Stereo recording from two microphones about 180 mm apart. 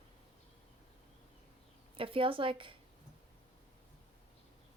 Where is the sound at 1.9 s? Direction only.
30° right (ahead or behind).